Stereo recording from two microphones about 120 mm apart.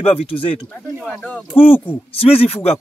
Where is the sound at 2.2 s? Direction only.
50° left (ahead or behind).